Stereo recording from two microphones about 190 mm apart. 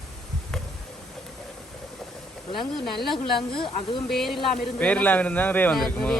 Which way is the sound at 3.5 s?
25° left (ahead or behind).